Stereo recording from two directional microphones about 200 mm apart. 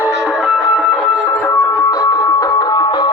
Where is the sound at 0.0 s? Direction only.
5° right (ahead or behind).